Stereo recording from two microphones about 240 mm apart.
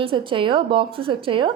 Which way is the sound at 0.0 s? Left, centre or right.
Right.